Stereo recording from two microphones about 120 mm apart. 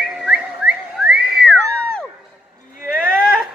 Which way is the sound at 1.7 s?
10° left (ahead or behind).